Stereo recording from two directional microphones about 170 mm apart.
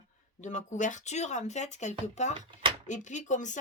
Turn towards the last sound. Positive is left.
turn(degrees=45)  # may be behind; listen again after turning